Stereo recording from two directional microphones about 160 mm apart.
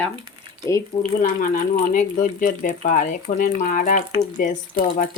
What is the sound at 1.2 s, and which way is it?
Speech, 55° left (ahead or behind).